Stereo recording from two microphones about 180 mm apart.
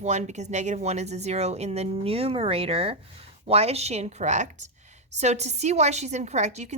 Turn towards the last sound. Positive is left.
turn(degrees=-40)  # may be behind; listen again after turning